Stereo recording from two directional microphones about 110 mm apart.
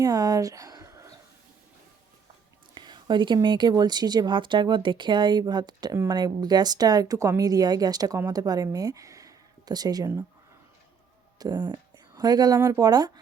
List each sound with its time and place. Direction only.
0.0 s speech: 35° right (ahead or behind)
2.7 s a woman's voice: 45° right (ahead or behind)
11.3 s a woman's voice: 35° right (ahead or behind)
12.5 s speech: 25° right (ahead or behind)
12.8 s a woman's voice: 35° right (ahead or behind)